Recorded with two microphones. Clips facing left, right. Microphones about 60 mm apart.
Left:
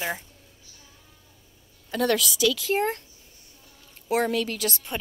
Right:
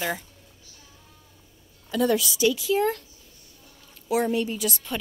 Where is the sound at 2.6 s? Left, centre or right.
Left.